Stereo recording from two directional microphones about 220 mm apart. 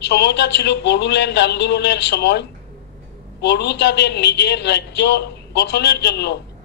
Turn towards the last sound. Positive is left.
turn(degrees=50)  # may be behind; listen again after turning